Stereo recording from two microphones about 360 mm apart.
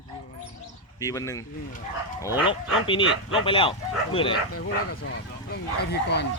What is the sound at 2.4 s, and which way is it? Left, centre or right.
Speech, centre.